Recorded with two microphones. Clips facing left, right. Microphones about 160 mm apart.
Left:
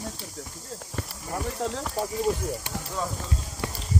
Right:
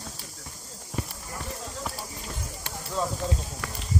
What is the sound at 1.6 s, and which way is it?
Speech, 75° left (ahead or behind).